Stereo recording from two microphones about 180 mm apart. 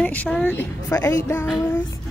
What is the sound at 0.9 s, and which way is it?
Speech, 20° left (ahead or behind).